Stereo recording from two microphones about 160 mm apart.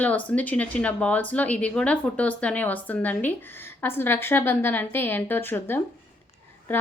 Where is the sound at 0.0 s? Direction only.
10° left (ahead or behind).